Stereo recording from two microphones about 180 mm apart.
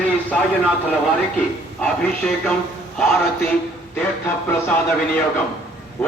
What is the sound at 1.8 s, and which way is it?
Speech, 5° left (ahead or behind).